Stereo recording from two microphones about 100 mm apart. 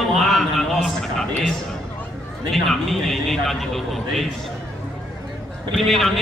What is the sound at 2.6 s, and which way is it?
A man's voice, centre (ahead or behind).